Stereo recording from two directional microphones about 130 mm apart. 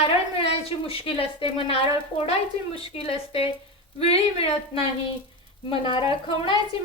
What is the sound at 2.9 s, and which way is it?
Speech, 50° left (ahead or behind).